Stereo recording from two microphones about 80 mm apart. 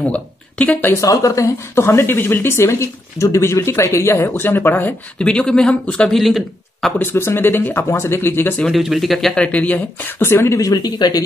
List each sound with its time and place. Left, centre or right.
0.1 s speech: centre
0.9 s speech: left
5.2 s speech: centre
7.0 s speech: left
8.7 s speech: centre
9.4 s speech: centre; by 10.6 s left
10.6 s speech: left